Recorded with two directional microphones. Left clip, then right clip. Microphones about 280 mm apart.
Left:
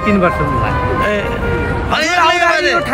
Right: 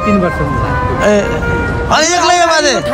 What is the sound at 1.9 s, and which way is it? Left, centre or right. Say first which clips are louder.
Speech: right 2 dB; centre.